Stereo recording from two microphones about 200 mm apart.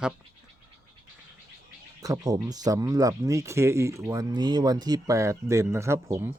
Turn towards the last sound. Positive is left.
turn(degrees=-15)  # may be behind; listen again after turning